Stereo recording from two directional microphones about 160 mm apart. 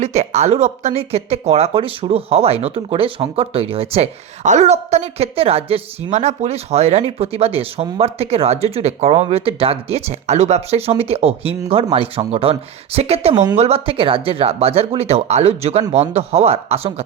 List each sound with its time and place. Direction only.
0.0 s speech: 45° right (ahead or behind)
13.3 s speech: 25° right (ahead or behind)
13.6 s speech: 40° right (ahead or behind)